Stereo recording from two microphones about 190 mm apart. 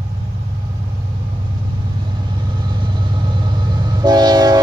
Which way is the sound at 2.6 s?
25° right (ahead or behind).